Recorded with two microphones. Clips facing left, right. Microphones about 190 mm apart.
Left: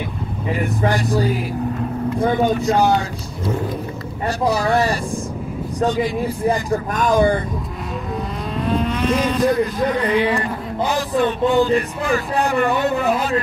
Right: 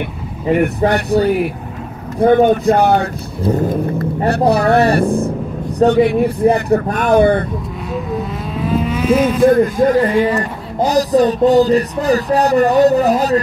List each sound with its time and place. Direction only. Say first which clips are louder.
0.5 s speech: right 7 dB; 65° right (ahead or behind)
3.5 s speech: right 8 dB; 45° right (ahead or behind); by 7.4 s 65° right (ahead or behind)
8.6 s vehicle: right 4 dB; 5° right (ahead or behind)
9.5 s a man's voice: right 7 dB; 50° right (ahead or behind)
10.8 s a sound: right 7 dB; 40° right (ahead or behind)